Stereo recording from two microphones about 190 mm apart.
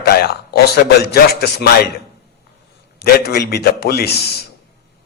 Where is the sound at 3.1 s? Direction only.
55° left (ahead or behind).